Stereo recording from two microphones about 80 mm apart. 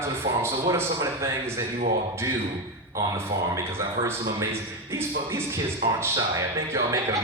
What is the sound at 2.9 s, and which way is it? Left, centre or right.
Speech, right.